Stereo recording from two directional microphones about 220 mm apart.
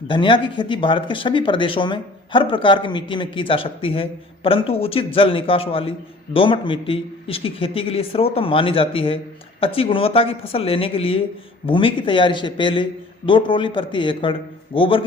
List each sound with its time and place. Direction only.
0.1 s speech: 20° left (ahead or behind)